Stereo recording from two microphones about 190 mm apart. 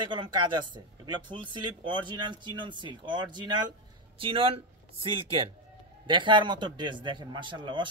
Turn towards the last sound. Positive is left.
turn(degrees=-25)  # may be behind; listen again after turning